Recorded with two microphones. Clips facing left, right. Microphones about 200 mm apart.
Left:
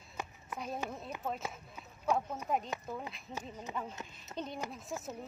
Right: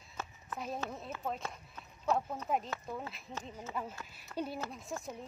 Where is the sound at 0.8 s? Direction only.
Centre (ahead or behind).